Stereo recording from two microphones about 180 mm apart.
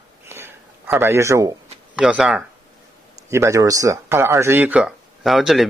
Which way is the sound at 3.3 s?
15° right (ahead or behind).